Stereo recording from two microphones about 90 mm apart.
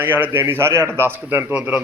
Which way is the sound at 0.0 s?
20° right (ahead or behind).